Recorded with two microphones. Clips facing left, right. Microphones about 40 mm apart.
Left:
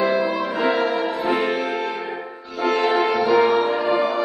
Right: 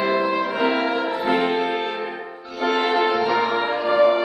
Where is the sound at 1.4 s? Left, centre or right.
Right.